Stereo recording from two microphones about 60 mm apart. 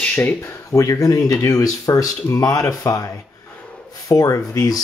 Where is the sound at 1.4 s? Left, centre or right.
Left.